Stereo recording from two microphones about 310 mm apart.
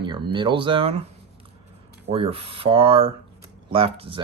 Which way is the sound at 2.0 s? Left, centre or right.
Centre.